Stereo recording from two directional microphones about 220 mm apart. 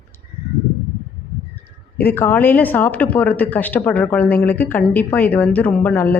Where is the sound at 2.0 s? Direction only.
10° left (ahead or behind).